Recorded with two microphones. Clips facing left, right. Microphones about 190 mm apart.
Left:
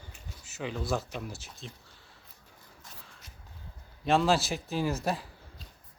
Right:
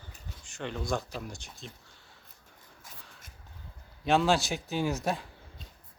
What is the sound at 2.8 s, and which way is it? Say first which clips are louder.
Dog: right 1 dB; centre (ahead or behind).